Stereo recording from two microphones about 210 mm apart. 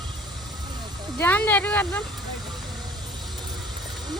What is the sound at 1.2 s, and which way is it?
Speech, 10° left (ahead or behind).